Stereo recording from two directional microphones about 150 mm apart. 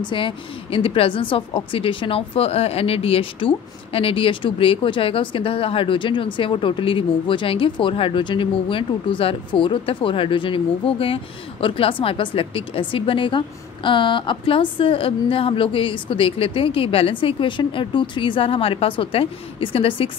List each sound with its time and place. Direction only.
0.1 s a woman's voice: 35° left (ahead or behind)